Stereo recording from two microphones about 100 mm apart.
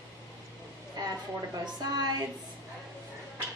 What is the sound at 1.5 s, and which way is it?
Speech, 45° right (ahead or behind).